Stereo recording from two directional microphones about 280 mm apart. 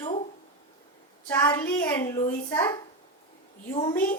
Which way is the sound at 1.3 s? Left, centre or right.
Centre.